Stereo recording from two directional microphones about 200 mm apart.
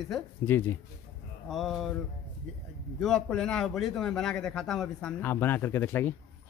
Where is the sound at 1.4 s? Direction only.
Centre (ahead or behind).